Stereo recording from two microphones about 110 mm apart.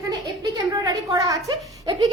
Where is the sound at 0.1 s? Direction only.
35° right (ahead or behind).